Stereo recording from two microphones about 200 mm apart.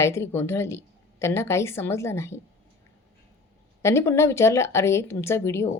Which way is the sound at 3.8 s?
15° left (ahead or behind).